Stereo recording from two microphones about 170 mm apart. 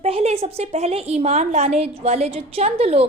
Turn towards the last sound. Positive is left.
turn(degrees=-35)  # may be behind; listen again after turning